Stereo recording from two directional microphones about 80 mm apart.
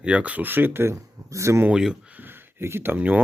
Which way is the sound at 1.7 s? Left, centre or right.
Centre.